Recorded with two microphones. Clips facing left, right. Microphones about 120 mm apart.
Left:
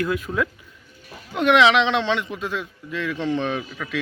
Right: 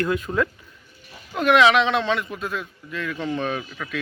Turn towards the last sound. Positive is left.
turn(degrees=-5)  # may be behind; listen again after turning